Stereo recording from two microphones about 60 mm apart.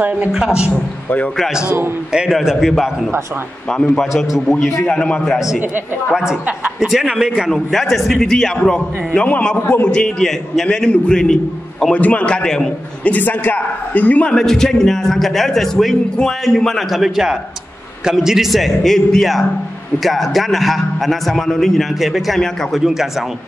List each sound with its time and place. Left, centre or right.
2.3 s a man's voice: centre
4.5 s a man's voice: centre
4.8 s a man's voice: centre
6.1 s a woman's voice: centre
6.9 s a woman's voice: centre
8.6 s a man's voice: left
9.6 s a man's voice: left
9.8 s a man's voice: centre
11.9 s a man's voice: left
13.0 s a man's voice: left
14.3 s a man's voice: centre